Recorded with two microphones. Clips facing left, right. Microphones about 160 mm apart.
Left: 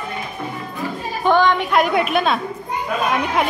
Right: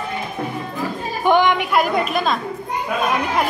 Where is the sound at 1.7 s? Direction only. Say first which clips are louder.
Left 1 dB; centre (ahead or behind).